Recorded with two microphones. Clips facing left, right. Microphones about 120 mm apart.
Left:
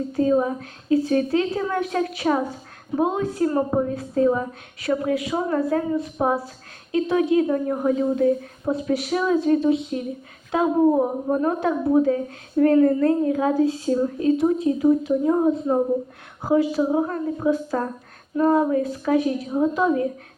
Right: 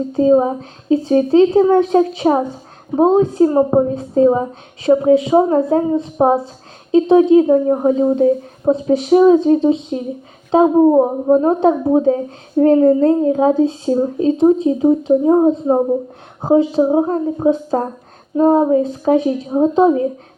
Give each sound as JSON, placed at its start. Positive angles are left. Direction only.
{"t": 0.1, "sound": "a woman's voice", "side_deg": -25}